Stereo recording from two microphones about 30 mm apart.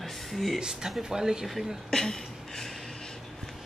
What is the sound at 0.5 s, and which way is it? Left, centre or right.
Speech, right.